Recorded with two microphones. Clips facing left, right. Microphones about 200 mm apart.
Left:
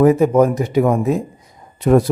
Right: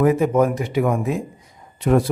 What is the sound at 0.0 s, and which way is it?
Speech, 40° left (ahead or behind).